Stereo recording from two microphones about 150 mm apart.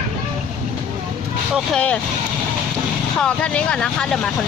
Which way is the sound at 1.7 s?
5° left (ahead or behind).